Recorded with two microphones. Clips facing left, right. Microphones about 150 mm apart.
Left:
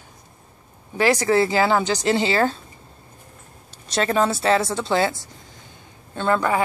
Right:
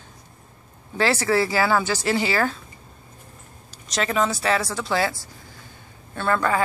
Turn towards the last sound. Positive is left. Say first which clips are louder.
# left 2 dB
turn(degrees=20)  # may be behind; listen again after turning